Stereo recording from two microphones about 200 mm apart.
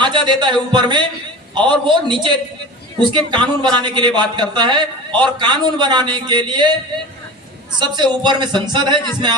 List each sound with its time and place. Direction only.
0.0 s a man's voice: 25° right (ahead or behind)
7.8 s a man's voice: 20° right (ahead or behind)